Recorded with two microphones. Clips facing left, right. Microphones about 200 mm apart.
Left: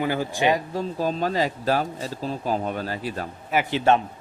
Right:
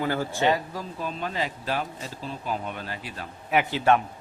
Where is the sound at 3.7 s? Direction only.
25° left (ahead or behind).